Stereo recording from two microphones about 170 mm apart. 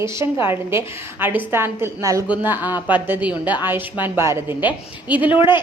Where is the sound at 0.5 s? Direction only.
15° right (ahead or behind).